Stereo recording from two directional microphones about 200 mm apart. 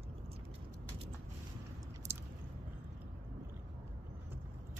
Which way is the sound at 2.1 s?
10° right (ahead or behind).